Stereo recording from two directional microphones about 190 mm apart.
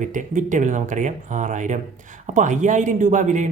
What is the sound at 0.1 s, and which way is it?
Speech, 40° right (ahead or behind).